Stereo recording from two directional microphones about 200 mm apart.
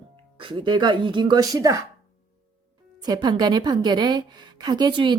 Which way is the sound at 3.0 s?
20° right (ahead or behind).